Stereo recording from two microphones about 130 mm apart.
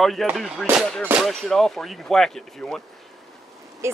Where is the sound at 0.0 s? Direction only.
Centre (ahead or behind).